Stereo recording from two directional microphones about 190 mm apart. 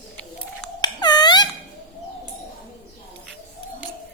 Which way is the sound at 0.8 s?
20° left (ahead or behind).